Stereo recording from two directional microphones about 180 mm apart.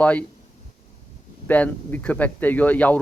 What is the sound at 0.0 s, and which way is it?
Speech, 10° left (ahead or behind).